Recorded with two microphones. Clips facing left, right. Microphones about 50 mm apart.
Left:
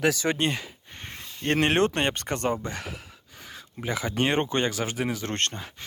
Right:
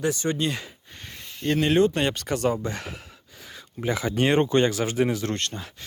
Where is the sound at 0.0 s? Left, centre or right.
Left.